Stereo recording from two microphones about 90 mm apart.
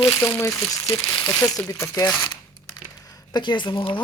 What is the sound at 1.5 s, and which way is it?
Speech, 35° left (ahead or behind).